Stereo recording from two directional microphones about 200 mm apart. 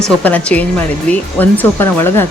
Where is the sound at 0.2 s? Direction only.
5° left (ahead or behind).